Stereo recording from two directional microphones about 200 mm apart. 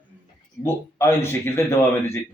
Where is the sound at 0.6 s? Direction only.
15° left (ahead or behind).